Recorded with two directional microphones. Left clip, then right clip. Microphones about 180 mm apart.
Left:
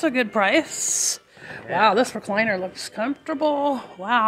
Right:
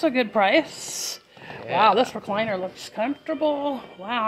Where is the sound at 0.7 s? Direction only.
50° left (ahead or behind).